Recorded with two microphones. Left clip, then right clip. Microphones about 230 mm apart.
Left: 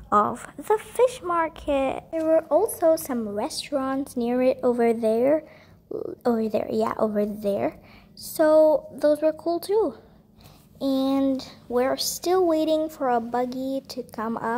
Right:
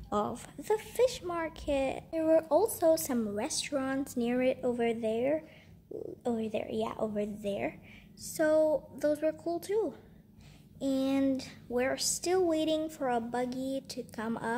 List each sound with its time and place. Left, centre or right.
0.1 s speech: centre
0.4 s speech: centre